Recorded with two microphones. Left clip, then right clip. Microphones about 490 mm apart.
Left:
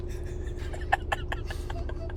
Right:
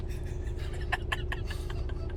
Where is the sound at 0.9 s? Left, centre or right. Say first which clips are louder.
Left 5 dB; centre.